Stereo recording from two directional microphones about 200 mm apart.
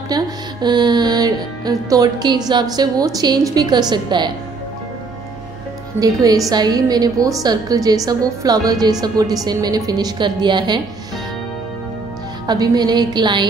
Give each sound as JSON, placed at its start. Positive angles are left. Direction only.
{"t": 0.1, "sound": "music", "side_deg": -20}
{"t": 5.9, "sound": "a woman's voice", "side_deg": -15}
{"t": 12.4, "sound": "a woman's voice", "side_deg": -20}